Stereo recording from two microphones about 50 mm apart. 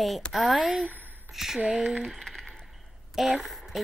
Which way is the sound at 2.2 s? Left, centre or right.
Centre.